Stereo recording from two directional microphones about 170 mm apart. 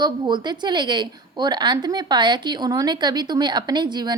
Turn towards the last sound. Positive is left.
turn(degrees=-25)  # may be behind; listen again after turning